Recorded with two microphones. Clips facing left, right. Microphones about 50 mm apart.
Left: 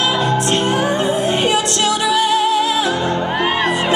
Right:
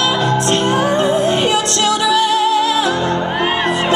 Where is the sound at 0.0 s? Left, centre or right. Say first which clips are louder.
Right 1 dB; centre.